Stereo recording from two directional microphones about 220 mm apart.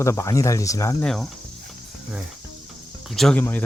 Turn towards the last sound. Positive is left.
turn(degrees=5)  # may be behind; listen again after turning